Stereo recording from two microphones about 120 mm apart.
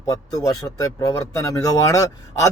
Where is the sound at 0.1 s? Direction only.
30° left (ahead or behind).